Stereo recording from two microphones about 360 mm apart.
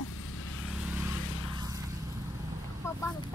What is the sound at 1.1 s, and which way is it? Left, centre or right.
Vehicle, left.